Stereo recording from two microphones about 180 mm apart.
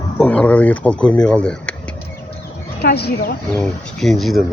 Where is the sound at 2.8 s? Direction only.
65° left (ahead or behind).